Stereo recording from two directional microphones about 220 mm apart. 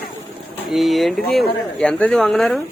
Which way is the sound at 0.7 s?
Centre (ahead or behind).